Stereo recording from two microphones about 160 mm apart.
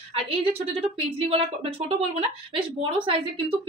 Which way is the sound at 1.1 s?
40° right (ahead or behind).